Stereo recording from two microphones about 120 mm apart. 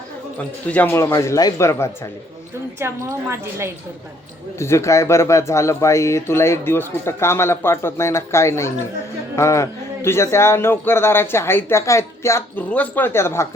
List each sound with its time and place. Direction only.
0.3 s speech: 15° left (ahead or behind)
0.9 s speech: 25° left (ahead or behind)
2.7 s a woman's voice: 20° right (ahead or behind)
4.6 s speech: 25° left (ahead or behind)